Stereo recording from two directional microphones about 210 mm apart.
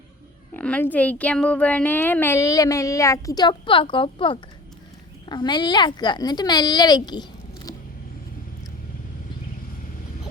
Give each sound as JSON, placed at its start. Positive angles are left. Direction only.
{"t": 0.5, "sound": "a woman's voice", "side_deg": 10}